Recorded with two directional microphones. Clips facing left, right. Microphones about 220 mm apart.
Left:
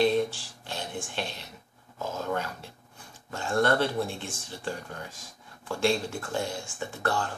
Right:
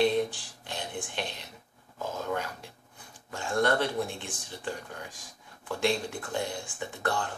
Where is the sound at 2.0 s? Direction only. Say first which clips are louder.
Left 1 dB; 15° right (ahead or behind).